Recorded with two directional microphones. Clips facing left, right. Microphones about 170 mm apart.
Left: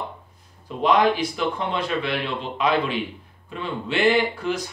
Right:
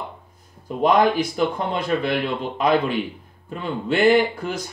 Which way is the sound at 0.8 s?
45° right (ahead or behind).